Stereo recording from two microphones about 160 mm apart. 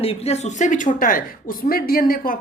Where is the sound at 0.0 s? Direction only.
40° left (ahead or behind).